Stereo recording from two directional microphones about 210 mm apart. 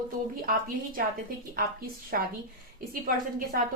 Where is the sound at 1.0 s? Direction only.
45° right (ahead or behind).